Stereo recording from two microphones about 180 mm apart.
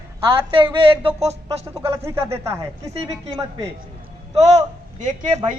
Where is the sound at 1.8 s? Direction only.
15° right (ahead or behind).